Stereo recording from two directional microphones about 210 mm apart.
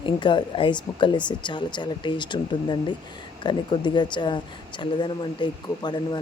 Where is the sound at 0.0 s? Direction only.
20° left (ahead or behind).